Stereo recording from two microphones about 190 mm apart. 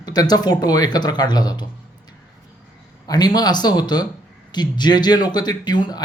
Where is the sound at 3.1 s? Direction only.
20° left (ahead or behind).